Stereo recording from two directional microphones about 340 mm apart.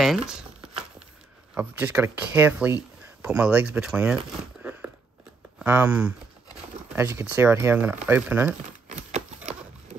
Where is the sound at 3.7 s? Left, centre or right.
Centre.